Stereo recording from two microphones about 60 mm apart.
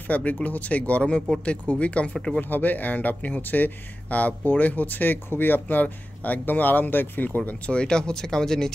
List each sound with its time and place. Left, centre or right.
0.1 s speech: left
7.7 s speech: centre